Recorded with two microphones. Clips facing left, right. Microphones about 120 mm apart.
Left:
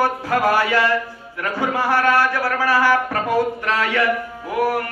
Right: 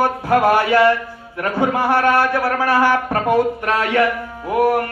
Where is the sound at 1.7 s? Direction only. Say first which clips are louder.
Even; 55° right (ahead or behind).